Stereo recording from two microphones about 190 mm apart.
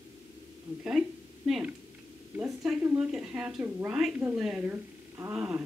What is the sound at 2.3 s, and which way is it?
A woman's voice, 10° right (ahead or behind).